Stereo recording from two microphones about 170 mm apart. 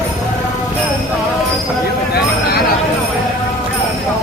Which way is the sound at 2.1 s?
65° left (ahead or behind).